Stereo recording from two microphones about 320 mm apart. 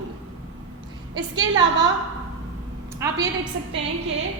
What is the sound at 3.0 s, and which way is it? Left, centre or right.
Speech, centre.